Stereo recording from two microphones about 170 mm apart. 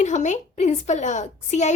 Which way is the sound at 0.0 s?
45° left (ahead or behind).